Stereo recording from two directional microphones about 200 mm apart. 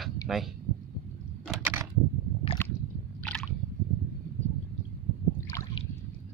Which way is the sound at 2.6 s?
10° left (ahead or behind).